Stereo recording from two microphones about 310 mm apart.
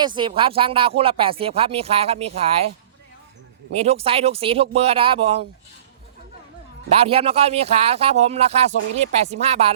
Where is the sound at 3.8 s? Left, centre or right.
Centre.